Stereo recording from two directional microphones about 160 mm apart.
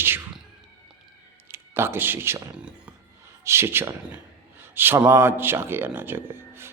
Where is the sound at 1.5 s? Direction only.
15° right (ahead or behind).